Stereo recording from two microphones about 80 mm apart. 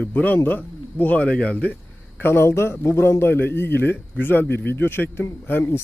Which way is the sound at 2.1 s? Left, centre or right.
Left.